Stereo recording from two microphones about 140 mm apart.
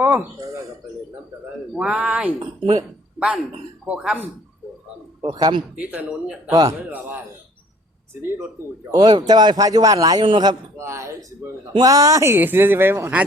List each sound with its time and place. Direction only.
0.0 s speech: 10° right (ahead or behind)
1.7 s speech: 5° right (ahead or behind)
5.2 s a man's voice: 30° right (ahead or behind)
5.9 s speech: 10° right (ahead or behind)
6.5 s a man's voice: 25° right (ahead or behind)
8.2 s speech: 15° right (ahead or behind)
8.9 s a man's voice: 30° right (ahead or behind)
10.2 s a man's voice: 35° right (ahead or behind)
10.8 s a man's voice: 20° right (ahead or behind)